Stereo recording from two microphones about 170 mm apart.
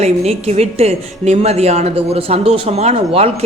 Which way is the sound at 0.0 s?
40° right (ahead or behind).